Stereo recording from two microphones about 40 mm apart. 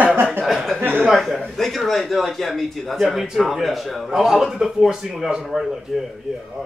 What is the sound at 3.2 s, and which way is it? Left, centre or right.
A man's voice, centre.